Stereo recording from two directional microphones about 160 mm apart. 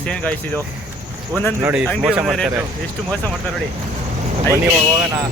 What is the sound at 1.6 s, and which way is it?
Speech, 15° right (ahead or behind).